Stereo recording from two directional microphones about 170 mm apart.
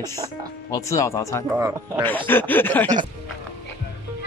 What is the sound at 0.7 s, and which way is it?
Speech, 20° left (ahead or behind).